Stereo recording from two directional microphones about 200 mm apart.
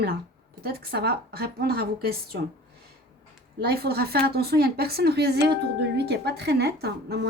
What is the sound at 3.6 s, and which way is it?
A woman's voice, 50° right (ahead or behind).